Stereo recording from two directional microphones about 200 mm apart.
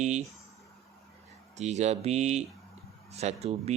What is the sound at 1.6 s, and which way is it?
Speech, 35° right (ahead or behind).